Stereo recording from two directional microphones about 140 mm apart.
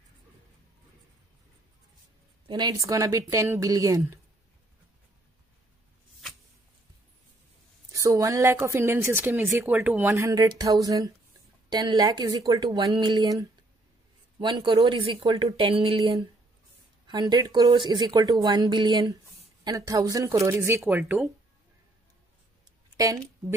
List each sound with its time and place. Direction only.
2.4 s speech: 30° right (ahead or behind)
7.9 s speech: 25° right (ahead or behind); by 16.0 s 40° right (ahead or behind)
17.1 s speech: 30° right (ahead or behind)
21.0 s speech: 5° right (ahead or behind)
22.9 s speech: 25° right (ahead or behind)